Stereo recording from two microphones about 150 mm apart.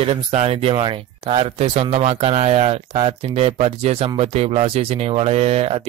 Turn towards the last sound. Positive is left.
turn(degrees=-40)  # may be behind; listen again after turning